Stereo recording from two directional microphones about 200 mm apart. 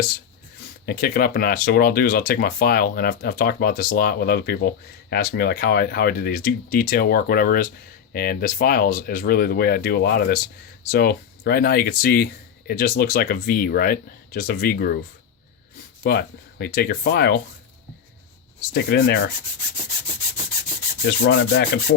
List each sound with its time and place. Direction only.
0.9 s speech: 50° left (ahead or behind)
16.0 s speech: 50° left (ahead or behind)
18.7 s rub: 55° left (ahead or behind)
21.1 s rub: 60° left (ahead or behind)